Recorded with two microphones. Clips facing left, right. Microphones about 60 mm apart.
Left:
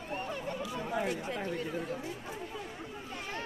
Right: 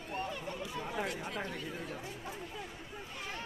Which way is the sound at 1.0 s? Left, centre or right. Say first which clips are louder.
Left 4 dB; left.